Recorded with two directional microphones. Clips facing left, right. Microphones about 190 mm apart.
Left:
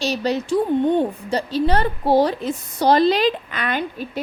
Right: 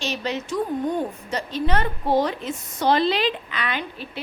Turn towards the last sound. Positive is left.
turn(degrees=45)  # may be behind; listen again after turning